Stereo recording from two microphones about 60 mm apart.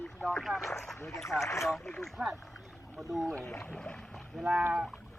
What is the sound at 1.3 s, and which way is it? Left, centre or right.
Boat, left.